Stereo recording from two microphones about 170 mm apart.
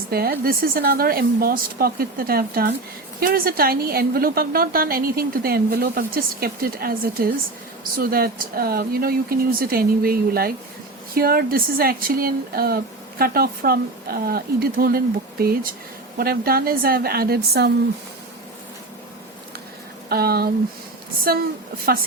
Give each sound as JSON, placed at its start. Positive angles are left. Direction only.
{"t": 0.1, "sound": "speech", "side_deg": -65}
{"t": 20.1, "sound": "speech", "side_deg": -65}